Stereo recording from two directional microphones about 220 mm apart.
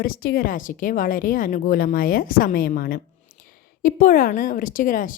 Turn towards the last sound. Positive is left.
turn(degrees=40)  # may be behind; listen again after turning